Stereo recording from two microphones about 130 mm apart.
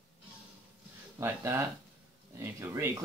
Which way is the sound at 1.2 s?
20° right (ahead or behind).